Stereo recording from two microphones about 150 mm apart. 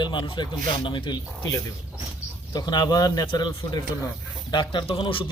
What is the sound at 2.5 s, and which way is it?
A man's voice, 25° left (ahead or behind).